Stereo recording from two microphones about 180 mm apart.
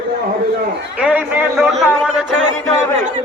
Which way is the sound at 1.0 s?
10° right (ahead or behind).